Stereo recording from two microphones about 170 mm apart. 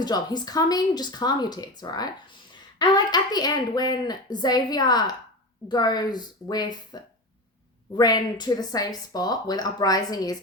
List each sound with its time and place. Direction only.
0.0 s a woman's voice: 25° left (ahead or behind)